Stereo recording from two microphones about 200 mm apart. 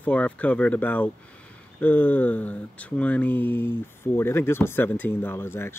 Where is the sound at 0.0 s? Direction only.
5° left (ahead or behind).